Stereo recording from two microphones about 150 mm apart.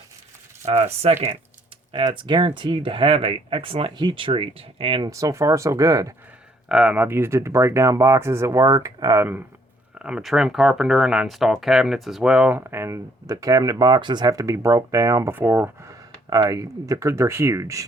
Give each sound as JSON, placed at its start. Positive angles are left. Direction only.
{"t": 0.6, "sound": "speech", "side_deg": -50}
{"t": 1.9, "sound": "speech", "side_deg": -35}
{"t": 5.1, "sound": "speech", "side_deg": -20}
{"t": 6.7, "sound": "speech", "side_deg": -5}
{"t": 10.0, "sound": "speech", "side_deg": -5}